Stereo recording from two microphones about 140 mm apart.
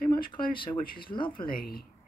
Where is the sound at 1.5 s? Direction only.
90° left.